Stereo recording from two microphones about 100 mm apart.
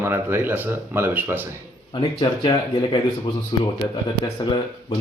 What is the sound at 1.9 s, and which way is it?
Speech, 60° left (ahead or behind).